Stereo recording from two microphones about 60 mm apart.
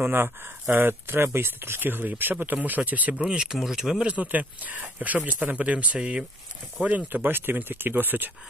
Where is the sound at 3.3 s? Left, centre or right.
Centre.